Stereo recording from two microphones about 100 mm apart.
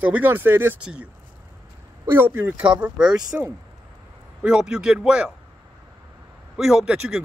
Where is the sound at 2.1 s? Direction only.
20° right (ahead or behind).